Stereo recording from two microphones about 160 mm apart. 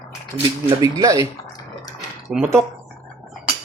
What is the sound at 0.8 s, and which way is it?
Speech, 20° right (ahead or behind).